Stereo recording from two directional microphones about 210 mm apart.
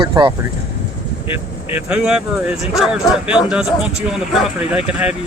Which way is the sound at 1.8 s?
5° right (ahead or behind).